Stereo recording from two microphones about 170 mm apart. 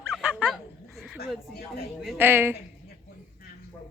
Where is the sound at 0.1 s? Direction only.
5° right (ahead or behind).